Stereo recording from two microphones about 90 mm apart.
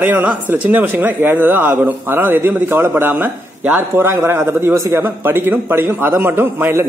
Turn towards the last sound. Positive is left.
turn(degrees=-25)  # may be behind; listen again after turning